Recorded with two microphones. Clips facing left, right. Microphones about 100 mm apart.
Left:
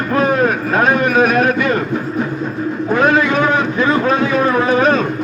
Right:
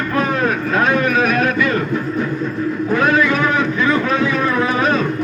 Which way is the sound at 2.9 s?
35° left (ahead or behind).